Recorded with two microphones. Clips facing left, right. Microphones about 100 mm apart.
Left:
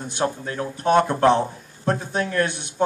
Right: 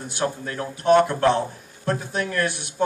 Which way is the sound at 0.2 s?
20° left (ahead or behind).